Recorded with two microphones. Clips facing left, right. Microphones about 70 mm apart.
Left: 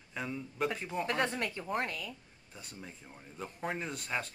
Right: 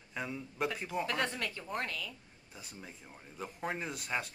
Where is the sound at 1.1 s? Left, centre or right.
Centre.